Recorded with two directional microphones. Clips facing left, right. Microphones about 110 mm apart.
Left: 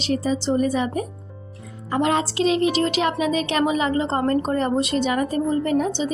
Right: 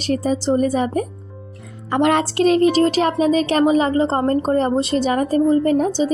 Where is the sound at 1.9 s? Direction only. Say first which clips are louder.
Right 4 dB; 65° right (ahead or behind).